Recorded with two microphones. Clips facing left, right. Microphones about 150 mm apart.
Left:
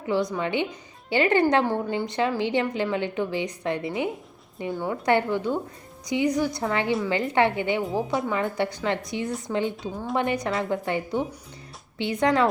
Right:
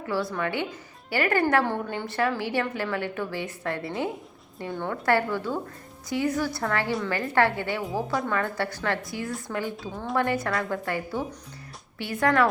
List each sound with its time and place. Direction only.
0.0 s a woman's voice: 20° left (ahead or behind)